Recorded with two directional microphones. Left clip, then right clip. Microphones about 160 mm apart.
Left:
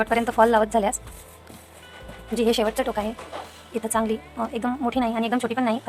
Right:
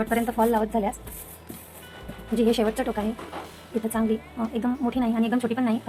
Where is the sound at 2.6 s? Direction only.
30° left (ahead or behind).